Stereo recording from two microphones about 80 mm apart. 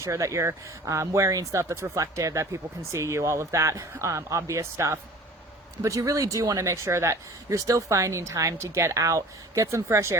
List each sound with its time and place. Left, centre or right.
0.0 s speech: right